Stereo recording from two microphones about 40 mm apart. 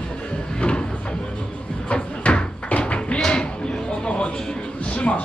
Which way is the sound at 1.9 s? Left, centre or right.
Left.